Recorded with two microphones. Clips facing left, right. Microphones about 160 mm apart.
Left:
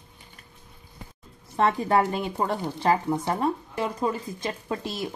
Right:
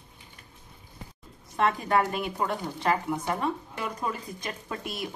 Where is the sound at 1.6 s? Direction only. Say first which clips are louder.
Left 3 dB; 30° left (ahead or behind).